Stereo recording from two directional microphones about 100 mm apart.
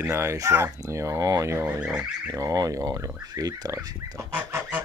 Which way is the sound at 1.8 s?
10° right (ahead or behind).